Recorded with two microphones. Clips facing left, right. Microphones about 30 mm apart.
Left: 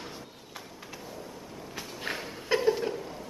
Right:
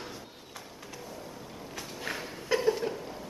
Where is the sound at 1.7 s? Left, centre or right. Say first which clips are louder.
Left 1 dB; centre.